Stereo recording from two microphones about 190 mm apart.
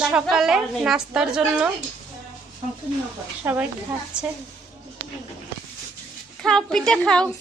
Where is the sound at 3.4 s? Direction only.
10° right (ahead or behind).